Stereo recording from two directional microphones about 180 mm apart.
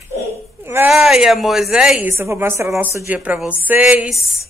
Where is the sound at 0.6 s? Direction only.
15° right (ahead or behind).